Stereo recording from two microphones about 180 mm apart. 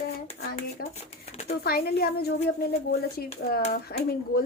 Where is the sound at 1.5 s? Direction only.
60° left (ahead or behind).